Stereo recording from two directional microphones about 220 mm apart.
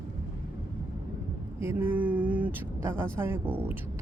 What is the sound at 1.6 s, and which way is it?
Speech, 10° right (ahead or behind).